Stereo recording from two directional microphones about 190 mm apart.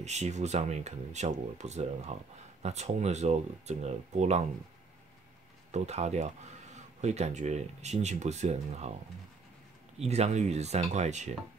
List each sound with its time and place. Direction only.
0.0 s speech: 35° right (ahead or behind)
5.7 s speech: 35° right (ahead or behind)
9.9 s speech: 35° right (ahead or behind)